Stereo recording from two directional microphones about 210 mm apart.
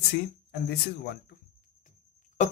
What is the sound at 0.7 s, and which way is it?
Speech, 50° left (ahead or behind).